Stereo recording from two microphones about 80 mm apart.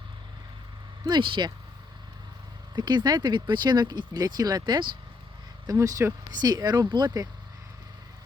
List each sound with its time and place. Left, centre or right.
1.0 s speech: right
2.7 s speech: right
5.7 s speech: right
6.3 s speech: right